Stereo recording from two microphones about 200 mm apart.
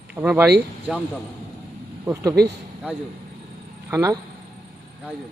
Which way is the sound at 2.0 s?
15° right (ahead or behind).